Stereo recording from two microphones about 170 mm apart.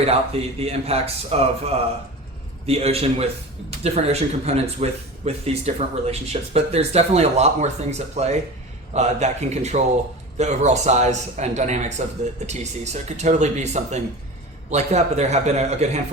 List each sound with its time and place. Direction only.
0.0 s a man's voice: 35° right (ahead or behind)